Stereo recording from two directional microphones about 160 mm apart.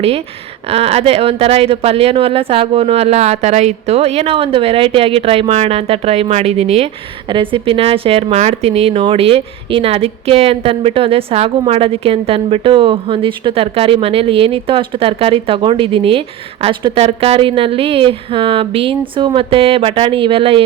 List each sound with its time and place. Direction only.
0.7 s speech: 40° right (ahead or behind)